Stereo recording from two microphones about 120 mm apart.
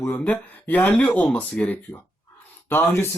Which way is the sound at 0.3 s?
15° left (ahead or behind).